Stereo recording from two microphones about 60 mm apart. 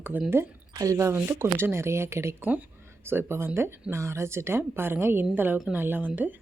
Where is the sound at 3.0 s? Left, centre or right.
Right.